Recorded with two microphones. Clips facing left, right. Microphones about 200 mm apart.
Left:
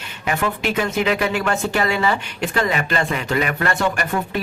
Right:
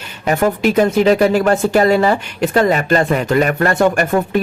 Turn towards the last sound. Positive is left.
turn(degrees=-45)  # may be behind; listen again after turning